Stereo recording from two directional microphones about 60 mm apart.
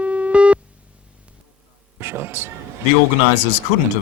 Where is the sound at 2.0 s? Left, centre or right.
Right.